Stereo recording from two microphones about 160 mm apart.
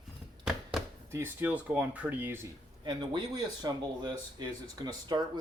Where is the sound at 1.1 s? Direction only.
10° right (ahead or behind).